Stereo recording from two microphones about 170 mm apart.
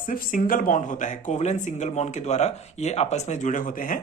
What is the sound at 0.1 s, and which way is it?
Speech, 55° left (ahead or behind).